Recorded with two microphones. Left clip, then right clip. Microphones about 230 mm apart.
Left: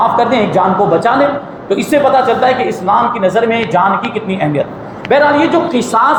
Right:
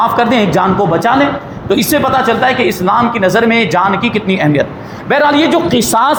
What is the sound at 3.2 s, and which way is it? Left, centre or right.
Speech, right.